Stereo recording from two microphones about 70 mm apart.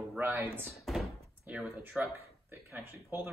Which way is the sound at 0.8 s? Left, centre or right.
Centre.